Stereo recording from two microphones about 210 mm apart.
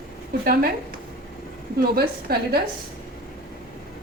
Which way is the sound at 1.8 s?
45° right (ahead or behind).